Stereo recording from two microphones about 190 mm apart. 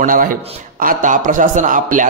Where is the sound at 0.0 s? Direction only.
45° right (ahead or behind).